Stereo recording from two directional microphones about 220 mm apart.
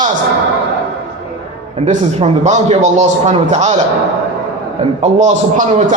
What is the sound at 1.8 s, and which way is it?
A man's voice, 30° right (ahead or behind).